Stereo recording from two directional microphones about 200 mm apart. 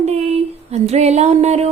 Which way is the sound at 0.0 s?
30° right (ahead or behind).